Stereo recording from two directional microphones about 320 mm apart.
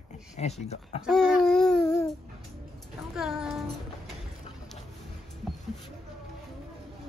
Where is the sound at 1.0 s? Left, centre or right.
Centre.